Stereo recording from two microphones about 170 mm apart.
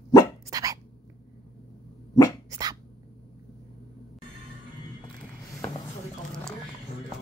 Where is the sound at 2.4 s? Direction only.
20° right (ahead or behind).